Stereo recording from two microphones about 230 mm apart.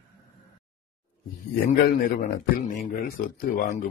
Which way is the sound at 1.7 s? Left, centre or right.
Left.